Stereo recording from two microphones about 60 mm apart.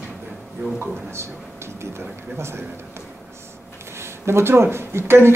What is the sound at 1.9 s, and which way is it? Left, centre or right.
Speech, right.